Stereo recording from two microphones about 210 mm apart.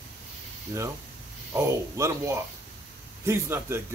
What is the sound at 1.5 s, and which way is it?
A man's voice, 15° right (ahead or behind).